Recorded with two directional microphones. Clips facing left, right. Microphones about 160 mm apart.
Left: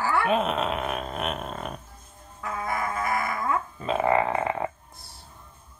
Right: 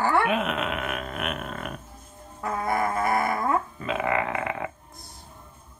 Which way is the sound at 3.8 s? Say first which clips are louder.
Left 3 dB; 35° left (ahead or behind).